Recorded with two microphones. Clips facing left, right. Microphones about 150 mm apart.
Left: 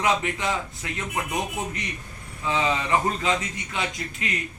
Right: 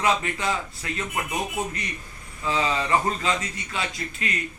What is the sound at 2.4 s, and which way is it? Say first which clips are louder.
A man's voice: even; 15° left (ahead or behind).